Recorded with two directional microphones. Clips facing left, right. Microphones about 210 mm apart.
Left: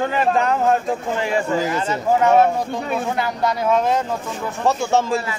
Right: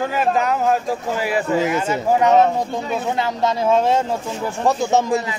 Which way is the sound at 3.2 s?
25° right (ahead or behind).